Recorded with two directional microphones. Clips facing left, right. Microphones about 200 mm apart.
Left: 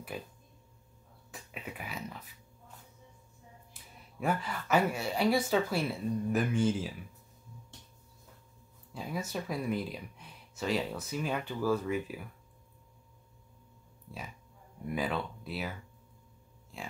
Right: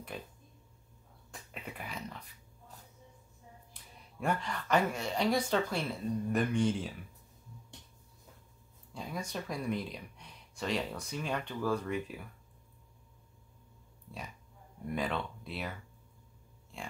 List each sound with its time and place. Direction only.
0.1 s speech: 5° left (ahead or behind)
1.3 s speech: 5° left (ahead or behind)
3.7 s speech: 5° left (ahead or behind)
8.9 s speech: 5° left (ahead or behind)
15.0 s speech: 5° left (ahead or behind)
16.7 s speech: centre (ahead or behind)